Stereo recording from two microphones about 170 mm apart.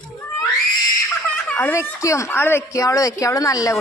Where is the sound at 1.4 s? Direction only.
10° left (ahead or behind).